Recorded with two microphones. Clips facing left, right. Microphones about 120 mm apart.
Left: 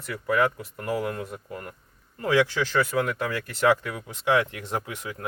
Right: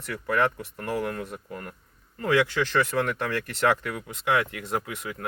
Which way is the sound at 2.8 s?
5° left (ahead or behind).